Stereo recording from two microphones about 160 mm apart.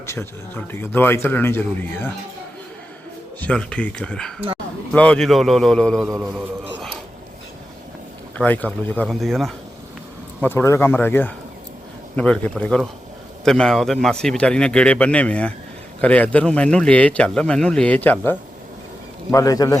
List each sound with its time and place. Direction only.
0.0 s speech: 15° left (ahead or behind)
3.4 s a man's voice: 5° left (ahead or behind)
8.4 s a man's voice: 10° left (ahead or behind)
10.4 s a man's voice: 15° left (ahead or behind)
19.3 s a man's voice: 20° left (ahead or behind)